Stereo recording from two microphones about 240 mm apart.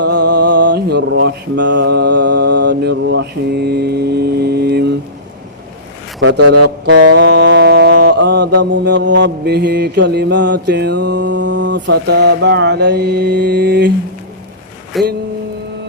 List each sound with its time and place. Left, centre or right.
0.1 s a sound: right
0.7 s mantra: right
6.4 s speech: right
6.8 s mantra: right
7.3 s music: right
8.0 s mantra: right
14.9 s a sound: centre